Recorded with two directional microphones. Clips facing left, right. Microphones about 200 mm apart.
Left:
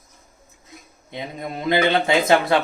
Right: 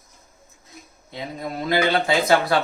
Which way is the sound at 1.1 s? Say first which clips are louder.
Even; 20° left (ahead or behind).